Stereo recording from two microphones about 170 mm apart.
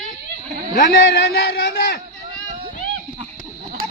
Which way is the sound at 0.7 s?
60° left (ahead or behind).